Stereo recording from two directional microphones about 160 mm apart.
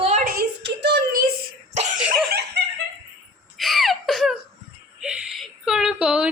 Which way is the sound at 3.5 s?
Centre (ahead or behind).